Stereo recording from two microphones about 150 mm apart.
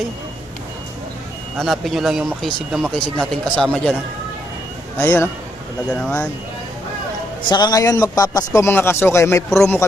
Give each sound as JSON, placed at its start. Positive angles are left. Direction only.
{"t": 1.5, "sound": "speech", "side_deg": 0}
{"t": 4.9, "sound": "speech", "side_deg": 15}
{"t": 7.4, "sound": "a man's voice", "side_deg": 30}